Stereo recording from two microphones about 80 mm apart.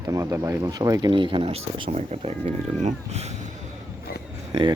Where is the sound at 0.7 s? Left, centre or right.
Right.